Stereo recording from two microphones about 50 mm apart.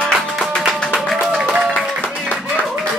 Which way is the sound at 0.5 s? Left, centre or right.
Centre.